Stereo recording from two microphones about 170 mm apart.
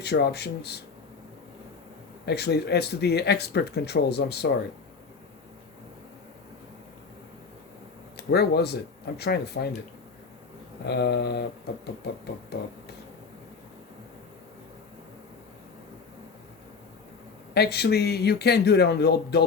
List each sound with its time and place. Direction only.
0.0 s speech: 75° left (ahead or behind)
2.2 s speech: 75° left (ahead or behind)
8.1 s speech: 70° left (ahead or behind)
10.8 s speech: 75° left (ahead or behind)
12.5 s speech: 75° left (ahead or behind)
17.5 s speech: 75° left (ahead or behind)